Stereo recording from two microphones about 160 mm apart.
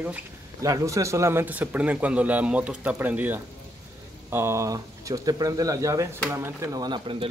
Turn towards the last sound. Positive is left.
turn(degrees=-35)  # may be behind; listen again after turning